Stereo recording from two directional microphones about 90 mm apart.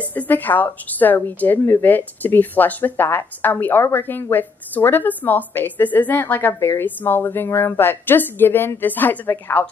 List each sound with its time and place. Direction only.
0.0 s speech: 20° left (ahead or behind)